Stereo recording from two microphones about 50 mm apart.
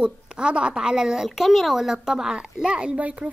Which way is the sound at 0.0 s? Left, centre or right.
Centre.